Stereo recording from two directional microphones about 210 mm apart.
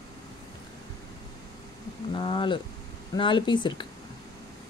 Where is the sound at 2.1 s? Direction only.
20° left (ahead or behind).